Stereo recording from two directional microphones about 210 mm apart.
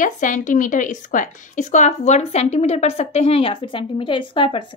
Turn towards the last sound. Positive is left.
turn(degrees=25)  # may be behind; listen again after turning